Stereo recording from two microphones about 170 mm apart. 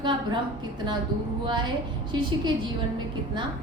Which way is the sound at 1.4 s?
25° right (ahead or behind).